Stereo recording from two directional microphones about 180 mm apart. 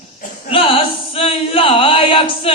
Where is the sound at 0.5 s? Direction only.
30° left (ahead or behind).